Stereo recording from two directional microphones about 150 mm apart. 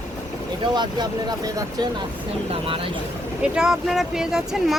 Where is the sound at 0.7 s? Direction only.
25° right (ahead or behind).